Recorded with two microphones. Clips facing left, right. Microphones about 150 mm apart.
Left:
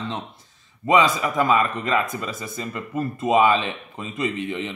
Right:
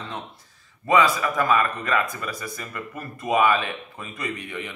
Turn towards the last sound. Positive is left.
turn(degrees=25)  # may be behind; listen again after turning